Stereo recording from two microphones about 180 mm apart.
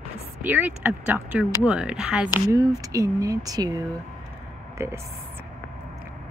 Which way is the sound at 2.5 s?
20° right (ahead or behind).